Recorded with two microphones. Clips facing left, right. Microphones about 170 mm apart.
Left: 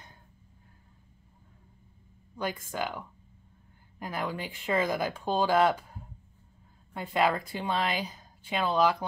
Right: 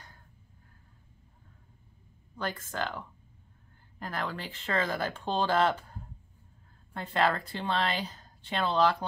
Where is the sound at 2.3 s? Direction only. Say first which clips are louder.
Left 2 dB; 10° left (ahead or behind).